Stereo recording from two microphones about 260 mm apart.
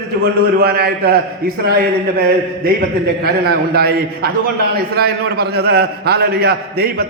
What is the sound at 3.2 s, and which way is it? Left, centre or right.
A man's voice, right.